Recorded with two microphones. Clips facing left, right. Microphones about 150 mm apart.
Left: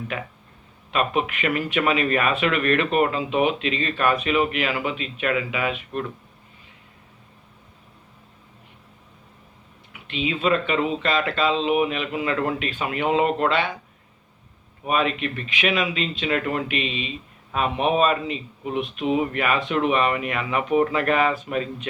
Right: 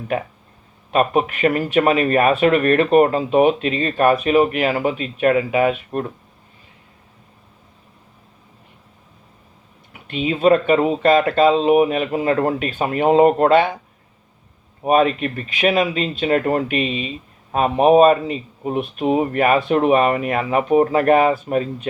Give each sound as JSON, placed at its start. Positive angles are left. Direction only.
{"t": 0.9, "sound": "speech", "side_deg": -45}
{"t": 9.9, "sound": "speech", "side_deg": -45}
{"t": 14.8, "sound": "speech", "side_deg": -40}